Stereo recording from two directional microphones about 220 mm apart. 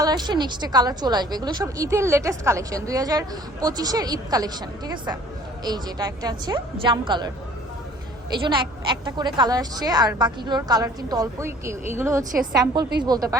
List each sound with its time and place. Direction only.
0.0 s a woman's voice: 20° right (ahead or behind)
8.4 s a woman's voice: 20° right (ahead or behind)